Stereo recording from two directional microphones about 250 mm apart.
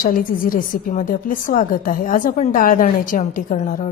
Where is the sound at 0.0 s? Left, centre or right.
Left.